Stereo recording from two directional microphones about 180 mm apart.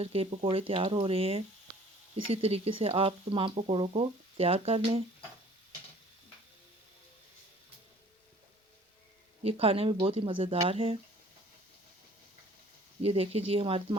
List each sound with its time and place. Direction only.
0.0 s speech: 30° right (ahead or behind)
9.4 s speech: 35° right (ahead or behind)
13.0 s speech: 35° right (ahead or behind)